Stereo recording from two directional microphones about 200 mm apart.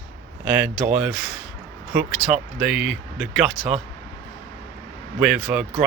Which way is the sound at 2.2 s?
20° left (ahead or behind).